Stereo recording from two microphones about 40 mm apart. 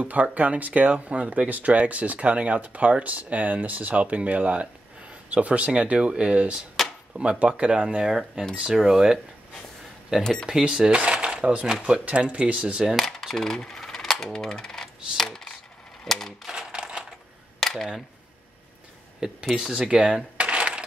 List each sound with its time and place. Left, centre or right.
0.0 s speech: right
8.7 s speech: centre
10.2 s speech: centre
10.9 s a sound: right
11.6 s speech: right
12.0 s speech: right
12.9 s coin: centre
16.0 s typewriter: centre
16.5 s typewriter: centre
17.6 s a sound: centre
19.5 s speech: centre
19.9 s speech: right
20.3 s a sound: right